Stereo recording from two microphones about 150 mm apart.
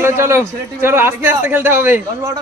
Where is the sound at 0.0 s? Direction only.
15° right (ahead or behind).